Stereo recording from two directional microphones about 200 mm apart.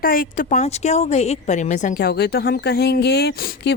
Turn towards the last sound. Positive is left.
turn(degrees=50)  # may be behind; listen again after turning